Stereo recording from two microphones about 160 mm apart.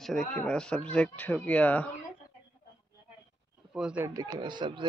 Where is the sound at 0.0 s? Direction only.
Centre (ahead or behind).